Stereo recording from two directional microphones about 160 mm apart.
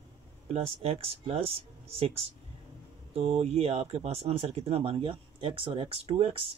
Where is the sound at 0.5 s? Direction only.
40° right (ahead or behind).